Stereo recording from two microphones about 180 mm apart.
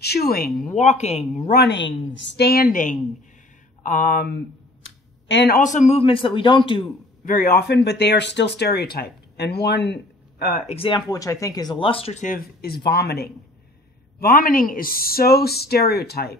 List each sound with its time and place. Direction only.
0.0 s speech: 65° left (ahead or behind)
0.7 s speech: 40° left (ahead or behind)
1.5 s speech: 70° left (ahead or behind)
4.8 s clicking: 75° left (ahead or behind)
5.6 s speech: 45° left (ahead or behind); by 6.8 s 25° left (ahead or behind)
7.2 s speech: 55° left (ahead or behind); by 9.9 s 70° left (ahead or behind)
10.7 s speech: 30° left (ahead or behind); by 16.3 s 60° left (ahead or behind)